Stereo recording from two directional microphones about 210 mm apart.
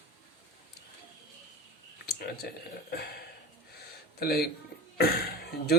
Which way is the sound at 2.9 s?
50° left (ahead or behind).